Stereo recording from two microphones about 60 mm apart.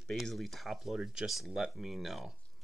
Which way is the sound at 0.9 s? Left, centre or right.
Centre.